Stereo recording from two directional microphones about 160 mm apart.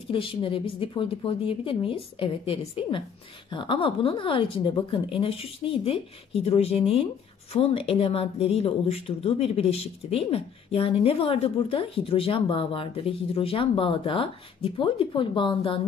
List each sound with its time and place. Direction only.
0.1 s speech: 35° left (ahead or behind)